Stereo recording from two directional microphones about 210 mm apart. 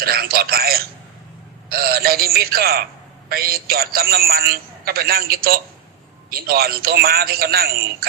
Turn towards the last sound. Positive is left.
turn(degrees=-45)  # may be behind; listen again after turning